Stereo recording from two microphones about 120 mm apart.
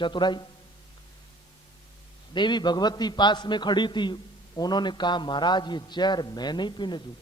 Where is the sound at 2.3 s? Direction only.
40° left (ahead or behind).